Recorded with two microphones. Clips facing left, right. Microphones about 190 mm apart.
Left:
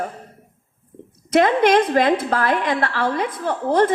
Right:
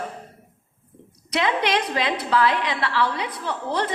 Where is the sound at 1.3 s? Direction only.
50° left (ahead or behind).